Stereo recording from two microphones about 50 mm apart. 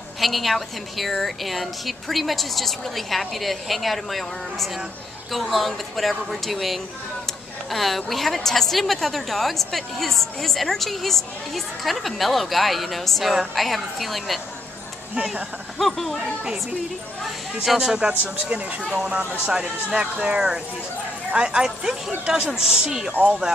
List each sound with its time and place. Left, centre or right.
0.2 s a woman's voice: centre
15.8 s a woman's voice: centre
17.6 s speech: centre
18.0 s speech: right